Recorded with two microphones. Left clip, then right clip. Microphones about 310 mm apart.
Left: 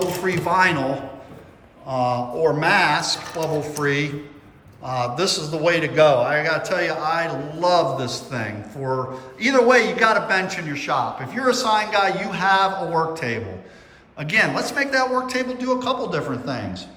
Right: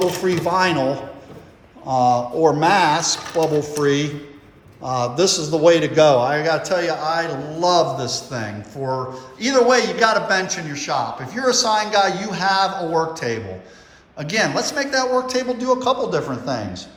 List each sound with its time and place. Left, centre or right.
0.0 s a man's voice: centre
1.9 s a man's voice: centre